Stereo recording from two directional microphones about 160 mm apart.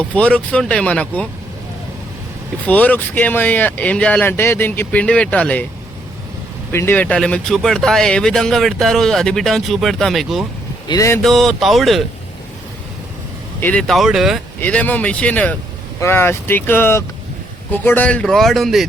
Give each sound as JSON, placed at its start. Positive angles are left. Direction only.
{"t": 0.1, "sound": "speech", "side_deg": 5}
{"t": 2.6, "sound": "speech", "side_deg": 10}
{"t": 6.7, "sound": "speech", "side_deg": 15}
{"t": 10.8, "sound": "speech", "side_deg": 20}
{"t": 11.2, "sound": "speech", "side_deg": 0}
{"t": 13.6, "sound": "speech", "side_deg": 10}
{"t": 14.6, "sound": "speech", "side_deg": 10}